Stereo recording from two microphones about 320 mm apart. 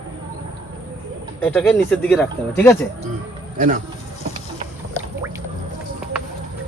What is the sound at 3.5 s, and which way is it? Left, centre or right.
Speech, right.